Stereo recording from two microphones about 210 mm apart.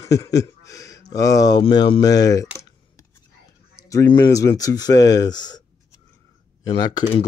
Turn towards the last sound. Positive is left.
turn(degrees=25)  # may be behind; listen again after turning